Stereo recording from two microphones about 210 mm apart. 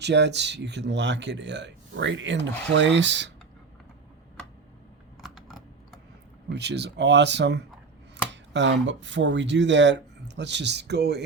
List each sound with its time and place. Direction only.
0.0 s speech: 55° right (ahead or behind)
5.2 s computer keyboard: centre (ahead or behind)
6.5 s speech: 55° right (ahead or behind)